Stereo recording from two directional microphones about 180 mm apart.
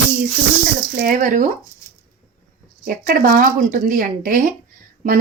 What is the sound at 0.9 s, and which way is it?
Speech, 45° right (ahead or behind).